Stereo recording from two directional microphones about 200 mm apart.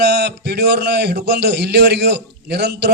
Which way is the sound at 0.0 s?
55° right (ahead or behind).